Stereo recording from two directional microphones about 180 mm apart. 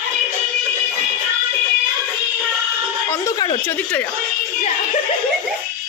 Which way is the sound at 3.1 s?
15° left (ahead or behind).